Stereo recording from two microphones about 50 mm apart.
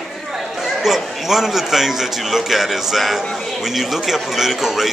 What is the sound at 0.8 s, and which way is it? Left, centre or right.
Speech, centre.